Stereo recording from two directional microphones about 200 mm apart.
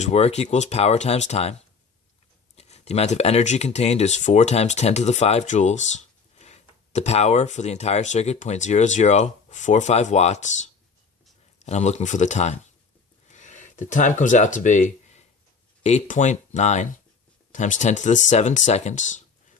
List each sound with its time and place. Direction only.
0.0 s speech: 30° left (ahead or behind)
2.6 s speech: 35° left (ahead or behind)